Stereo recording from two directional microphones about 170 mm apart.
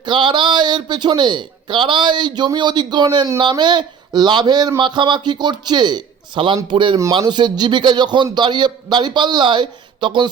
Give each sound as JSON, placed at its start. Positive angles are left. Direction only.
{"t": 0.0, "sound": "a man's voice", "side_deg": -30}